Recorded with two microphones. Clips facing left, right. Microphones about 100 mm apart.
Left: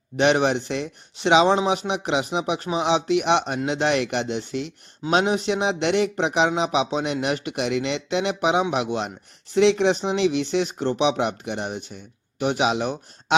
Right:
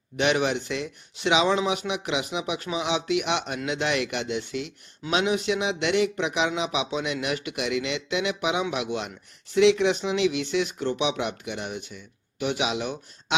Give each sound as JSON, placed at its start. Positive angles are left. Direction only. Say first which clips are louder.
{"t": 0.2, "sound": "speech", "louder": "left 4 dB", "side_deg": 35}